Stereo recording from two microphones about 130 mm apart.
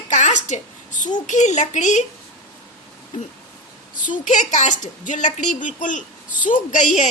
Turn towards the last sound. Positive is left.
turn(degrees=70)  # may be behind; listen again after turning